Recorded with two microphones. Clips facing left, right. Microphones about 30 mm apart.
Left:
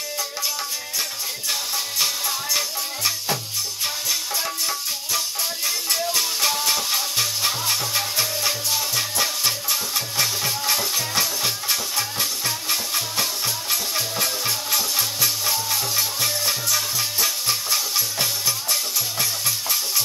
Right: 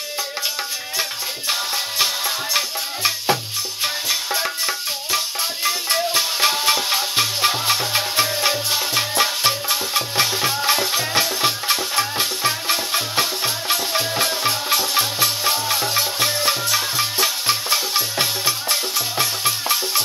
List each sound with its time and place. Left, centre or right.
1.5 s music: right